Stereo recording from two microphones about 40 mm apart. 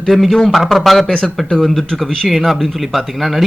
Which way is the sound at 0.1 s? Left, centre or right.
Centre.